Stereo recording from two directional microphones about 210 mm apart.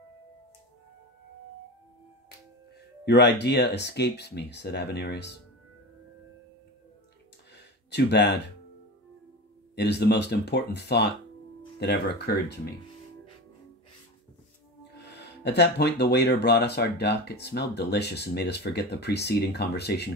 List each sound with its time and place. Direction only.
3.1 s speech: 50° left (ahead or behind)
7.5 s a sound: 55° left (ahead or behind)
9.8 s speech: 50° left (ahead or behind)
15.0 s speech: 55° left (ahead or behind)